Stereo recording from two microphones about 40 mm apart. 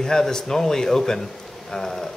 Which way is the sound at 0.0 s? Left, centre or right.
Centre.